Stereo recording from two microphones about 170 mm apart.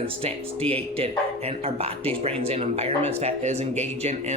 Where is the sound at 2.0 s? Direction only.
35° right (ahead or behind).